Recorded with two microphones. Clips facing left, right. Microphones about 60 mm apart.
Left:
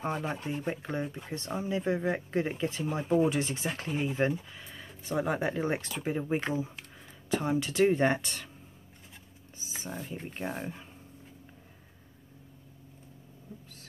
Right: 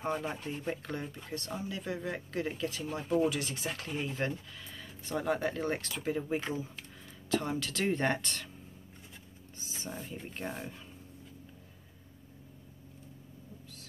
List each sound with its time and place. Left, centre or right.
0.0 s speech: centre
9.8 s speech: centre
10.5 s speech: left